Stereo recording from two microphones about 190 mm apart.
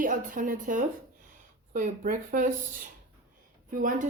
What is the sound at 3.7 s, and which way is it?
Speech, 45° right (ahead or behind).